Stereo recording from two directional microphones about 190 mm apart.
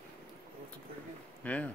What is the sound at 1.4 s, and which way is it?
Speech, 10° left (ahead or behind).